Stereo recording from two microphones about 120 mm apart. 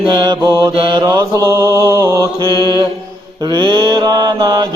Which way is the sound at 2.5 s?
35° right (ahead or behind).